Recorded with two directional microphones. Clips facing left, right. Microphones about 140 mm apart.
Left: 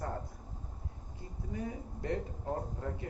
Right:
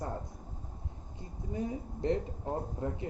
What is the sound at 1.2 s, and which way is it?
Speech, 20° right (ahead or behind).